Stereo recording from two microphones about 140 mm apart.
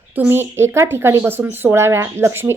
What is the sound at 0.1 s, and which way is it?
A woman's voice, 15° right (ahead or behind).